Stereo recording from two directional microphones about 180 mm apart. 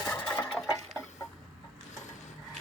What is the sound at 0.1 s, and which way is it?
Sewing machine, 10° left (ahead or behind).